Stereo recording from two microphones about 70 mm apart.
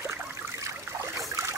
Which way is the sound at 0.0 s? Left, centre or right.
Right.